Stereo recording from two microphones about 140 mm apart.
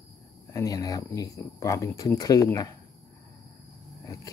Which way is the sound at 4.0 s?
25° left (ahead or behind).